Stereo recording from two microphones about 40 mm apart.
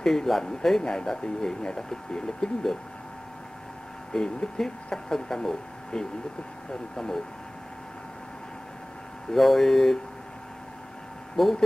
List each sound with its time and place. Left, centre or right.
0.0 s speech: centre
4.1 s speech: centre
9.3 s speech: centre
11.4 s speech: centre